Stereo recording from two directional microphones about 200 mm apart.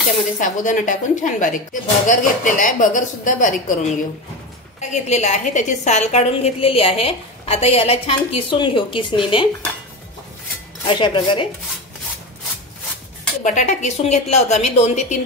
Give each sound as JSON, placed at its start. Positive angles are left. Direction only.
{"t": 0.4, "sound": "a woman's voice", "side_deg": 40}
{"t": 10.9, "sound": "a woman's voice", "side_deg": 25}
{"t": 13.4, "sound": "a woman's voice", "side_deg": 35}